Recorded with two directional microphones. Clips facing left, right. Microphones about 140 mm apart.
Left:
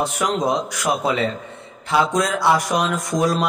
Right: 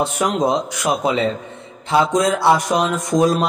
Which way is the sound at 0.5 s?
25° right (ahead or behind).